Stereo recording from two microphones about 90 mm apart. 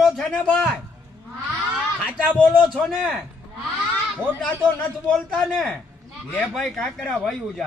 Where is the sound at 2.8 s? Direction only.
5° left (ahead or behind).